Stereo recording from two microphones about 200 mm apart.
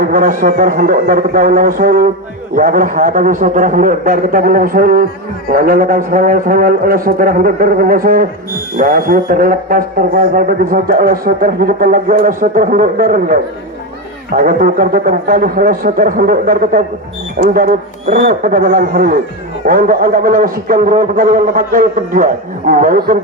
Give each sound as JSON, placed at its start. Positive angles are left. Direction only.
{"t": 0.0, "sound": "speech", "side_deg": -45}